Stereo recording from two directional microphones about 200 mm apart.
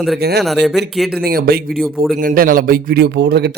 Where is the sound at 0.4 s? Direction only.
Centre (ahead or behind).